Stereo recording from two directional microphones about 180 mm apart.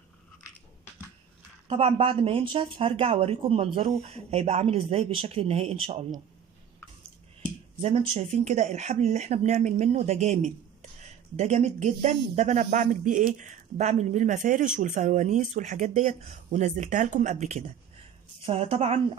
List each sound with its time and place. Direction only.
1.7 s speech: 30° right (ahead or behind)
7.8 s speech: 35° right (ahead or behind)
18.4 s speech: 30° right (ahead or behind)